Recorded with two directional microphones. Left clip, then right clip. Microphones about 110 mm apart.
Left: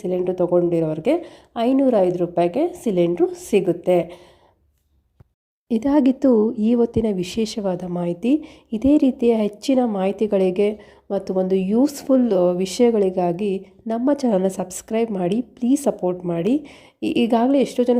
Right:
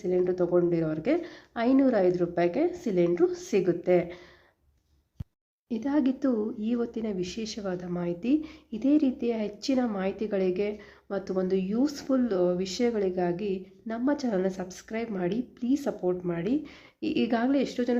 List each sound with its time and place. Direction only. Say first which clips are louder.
0.2 s speech: left 7 dB; 40° left (ahead or behind)
1.2 s a woman's voice: left 7 dB; 30° left (ahead or behind)
5.6 s speech: left 10 dB; 70° left (ahead or behind)
7.6 s a woman's voice: left 9 dB; 60° left (ahead or behind)
8.4 s a woman's voice: left 6 dB; 40° left (ahead or behind)
8.8 s a woman's voice: left 9 dB; 60° left (ahead or behind)